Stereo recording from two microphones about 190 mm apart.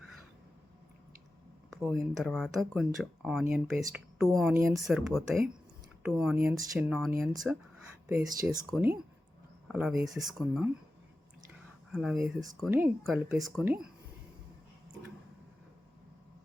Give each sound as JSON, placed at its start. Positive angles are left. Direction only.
{"t": 1.7, "sound": "speech", "side_deg": 0}
{"t": 7.1, "sound": "speech", "side_deg": -15}
{"t": 11.9, "sound": "speech", "side_deg": 0}